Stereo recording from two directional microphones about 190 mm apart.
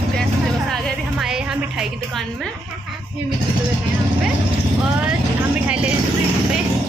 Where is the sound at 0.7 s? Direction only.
Centre (ahead or behind).